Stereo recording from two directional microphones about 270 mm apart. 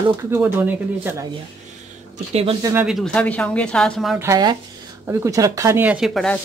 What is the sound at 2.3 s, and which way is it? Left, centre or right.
Speech, centre.